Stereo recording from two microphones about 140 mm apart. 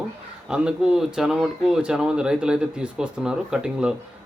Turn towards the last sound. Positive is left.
turn(degrees=-5)  # may be behind; listen again after turning